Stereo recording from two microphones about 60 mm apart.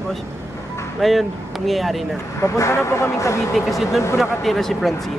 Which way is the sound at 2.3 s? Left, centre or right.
Left.